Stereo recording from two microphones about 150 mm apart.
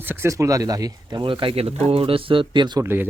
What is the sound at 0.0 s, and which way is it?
Speech, 15° right (ahead or behind).